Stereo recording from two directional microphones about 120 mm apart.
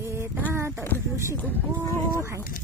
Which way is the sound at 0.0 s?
20° right (ahead or behind).